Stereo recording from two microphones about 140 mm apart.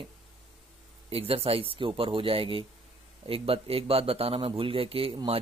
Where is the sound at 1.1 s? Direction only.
45° right (ahead or behind).